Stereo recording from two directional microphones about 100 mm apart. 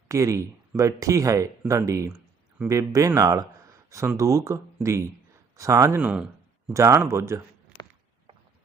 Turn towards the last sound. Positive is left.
turn(degrees=-30)  # may be behind; listen again after turning